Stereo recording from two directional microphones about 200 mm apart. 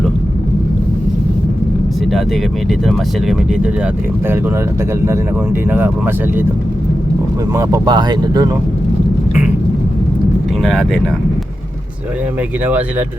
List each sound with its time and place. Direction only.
2.6 s speech: centre (ahead or behind)
5.7 s speech: 10° right (ahead or behind)
7.5 s speech: 15° right (ahead or behind)
10.6 s speech: centre (ahead or behind)
12.6 s speech: 10° right (ahead or behind)